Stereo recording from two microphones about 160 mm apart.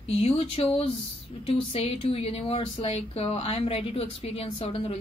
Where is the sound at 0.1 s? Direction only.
40° left (ahead or behind).